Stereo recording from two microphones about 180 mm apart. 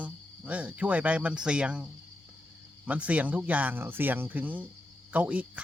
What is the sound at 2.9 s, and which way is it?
Speech, 10° right (ahead or behind).